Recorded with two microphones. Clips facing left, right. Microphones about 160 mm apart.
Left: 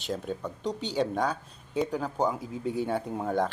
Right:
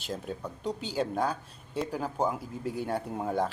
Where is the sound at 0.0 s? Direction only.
5° right (ahead or behind).